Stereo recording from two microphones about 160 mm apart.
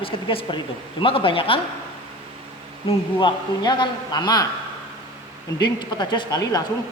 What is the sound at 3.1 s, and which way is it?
A man's voice, 30° left (ahead or behind).